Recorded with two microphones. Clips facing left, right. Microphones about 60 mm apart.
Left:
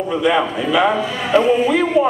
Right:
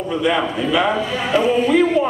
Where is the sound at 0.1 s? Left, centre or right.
Centre.